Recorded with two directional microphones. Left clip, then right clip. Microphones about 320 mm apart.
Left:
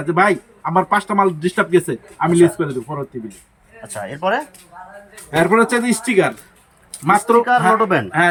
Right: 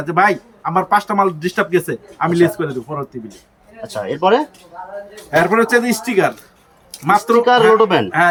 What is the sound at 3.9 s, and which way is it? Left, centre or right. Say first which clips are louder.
Speech: right 5 dB; right.